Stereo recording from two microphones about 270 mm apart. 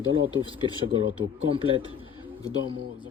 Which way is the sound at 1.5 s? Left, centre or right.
Centre.